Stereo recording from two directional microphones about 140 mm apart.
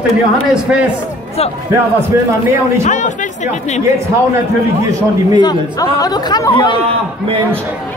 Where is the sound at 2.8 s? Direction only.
60° left (ahead or behind).